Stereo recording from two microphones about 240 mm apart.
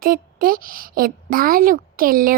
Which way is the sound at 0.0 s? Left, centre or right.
Right.